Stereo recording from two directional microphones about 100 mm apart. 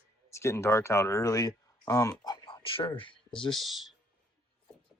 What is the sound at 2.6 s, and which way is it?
Speech, 60° left (ahead or behind).